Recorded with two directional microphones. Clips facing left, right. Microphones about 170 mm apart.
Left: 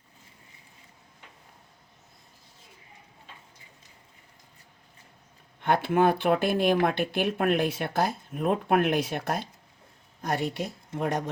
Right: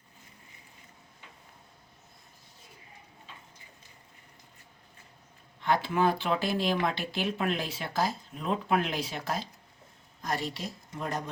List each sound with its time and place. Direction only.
5.5 s speech: 55° left (ahead or behind)